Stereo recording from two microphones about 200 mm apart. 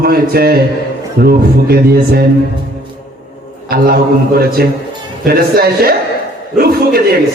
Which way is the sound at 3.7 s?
50° right (ahead or behind).